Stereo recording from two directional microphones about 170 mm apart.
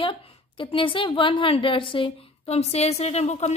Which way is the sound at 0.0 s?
30° left (ahead or behind).